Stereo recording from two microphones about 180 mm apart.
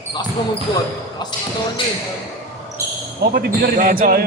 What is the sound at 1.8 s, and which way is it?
Speech, 25° left (ahead or behind).